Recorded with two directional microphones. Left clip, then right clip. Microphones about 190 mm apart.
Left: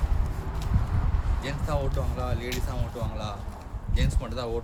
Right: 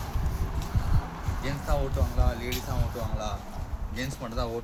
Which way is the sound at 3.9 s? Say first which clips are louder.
Even; 35° left (ahead or behind).